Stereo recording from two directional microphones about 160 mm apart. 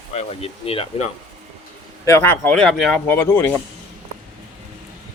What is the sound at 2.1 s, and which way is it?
Speech, 15° left (ahead or behind).